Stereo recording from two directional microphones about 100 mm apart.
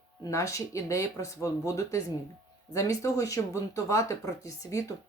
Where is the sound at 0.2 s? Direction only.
35° left (ahead or behind).